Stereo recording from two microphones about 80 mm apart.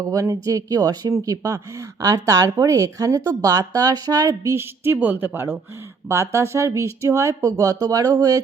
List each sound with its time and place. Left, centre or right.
0.0 s speech: right
4.5 s speech: right